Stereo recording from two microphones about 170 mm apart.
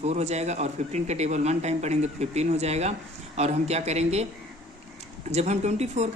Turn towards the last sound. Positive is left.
turn(degrees=-40)  # may be behind; listen again after turning